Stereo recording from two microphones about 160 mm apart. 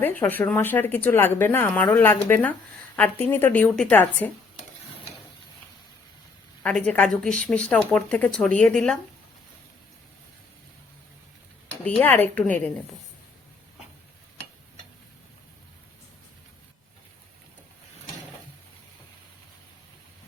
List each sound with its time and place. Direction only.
0.2 s speech: 10° left (ahead or behind)
6.6 s speech: 5° left (ahead or behind)
11.9 s speech: 10° left (ahead or behind)